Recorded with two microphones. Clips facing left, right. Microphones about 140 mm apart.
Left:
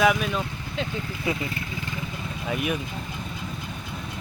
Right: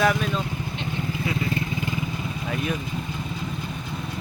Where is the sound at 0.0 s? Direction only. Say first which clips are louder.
Left 1 dB; 5° left (ahead or behind).